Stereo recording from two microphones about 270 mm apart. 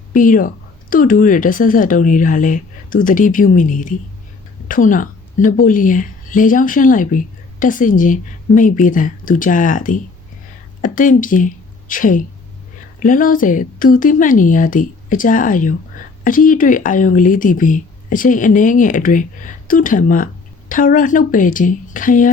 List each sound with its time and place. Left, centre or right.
0.1 s a woman's voice: left